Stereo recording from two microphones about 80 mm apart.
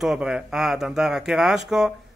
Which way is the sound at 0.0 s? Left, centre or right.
Centre.